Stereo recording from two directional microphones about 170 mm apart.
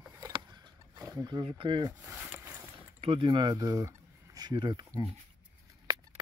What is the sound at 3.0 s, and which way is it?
Speech, 30° right (ahead or behind).